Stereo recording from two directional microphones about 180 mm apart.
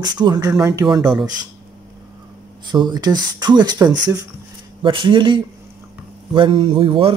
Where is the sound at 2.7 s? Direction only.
25° right (ahead or behind).